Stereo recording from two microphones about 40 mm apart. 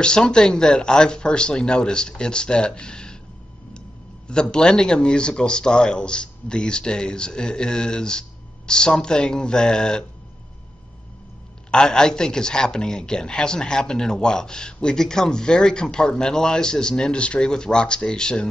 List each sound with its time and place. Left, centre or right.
0.0 s a man's voice: left
4.3 s a man's voice: left
11.7 s a man's voice: centre